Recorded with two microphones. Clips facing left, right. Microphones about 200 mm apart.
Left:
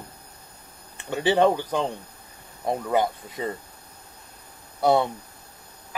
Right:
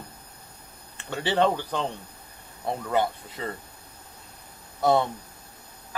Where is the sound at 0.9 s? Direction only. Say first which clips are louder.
Left 4 dB; 15° left (ahead or behind).